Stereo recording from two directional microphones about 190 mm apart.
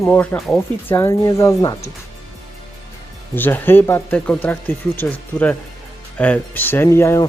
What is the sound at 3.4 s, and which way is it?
Speech, 10° left (ahead or behind).